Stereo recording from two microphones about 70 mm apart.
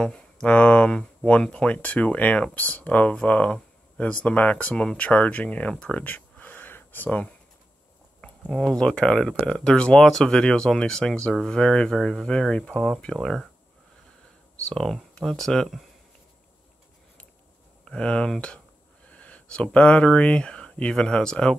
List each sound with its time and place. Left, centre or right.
0.0 s speech: centre
8.2 s speech: centre
14.7 s speech: centre
17.8 s speech: centre